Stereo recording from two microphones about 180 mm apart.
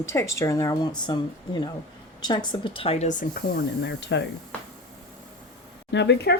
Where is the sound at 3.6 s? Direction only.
75° left (ahead or behind).